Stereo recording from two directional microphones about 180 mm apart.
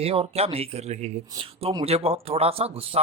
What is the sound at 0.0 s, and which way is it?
Speech, 30° right (ahead or behind).